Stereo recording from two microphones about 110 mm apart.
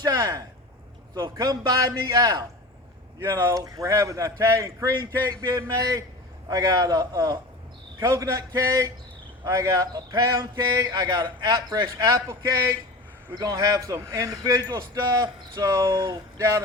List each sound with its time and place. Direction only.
0.0 s a man's voice: 35° right (ahead or behind)
3.2 s a man's voice: 25° right (ahead or behind)